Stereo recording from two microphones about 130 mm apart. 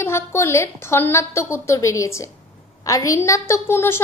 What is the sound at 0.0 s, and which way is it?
A woman's voice, 20° left (ahead or behind).